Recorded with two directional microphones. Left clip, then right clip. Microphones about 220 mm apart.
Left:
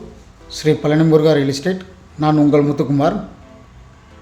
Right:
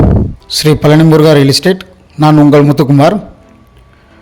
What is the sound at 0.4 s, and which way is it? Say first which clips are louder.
A man's voice: right 7 dB; 45° right (ahead or behind).